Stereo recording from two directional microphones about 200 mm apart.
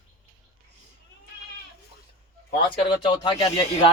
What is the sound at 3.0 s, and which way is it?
Speech, 25° left (ahead or behind).